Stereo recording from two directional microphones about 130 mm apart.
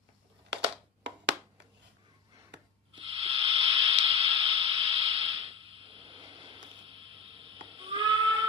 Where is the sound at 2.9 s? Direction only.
45° right (ahead or behind).